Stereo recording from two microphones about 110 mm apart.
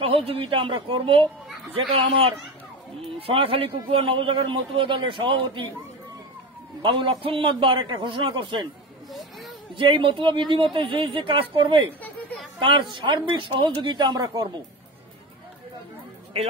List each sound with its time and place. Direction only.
0.1 s a woman's voice: 60° right (ahead or behind)
3.0 s a man's voice: 60° right (ahead or behind)
6.8 s a man's voice: 50° right (ahead or behind)
9.8 s a man's voice: 50° right (ahead or behind)